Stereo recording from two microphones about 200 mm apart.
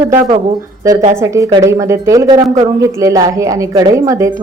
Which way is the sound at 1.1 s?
15° right (ahead or behind).